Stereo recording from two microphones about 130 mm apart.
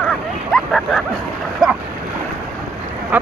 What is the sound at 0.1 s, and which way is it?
Dog, centre (ahead or behind).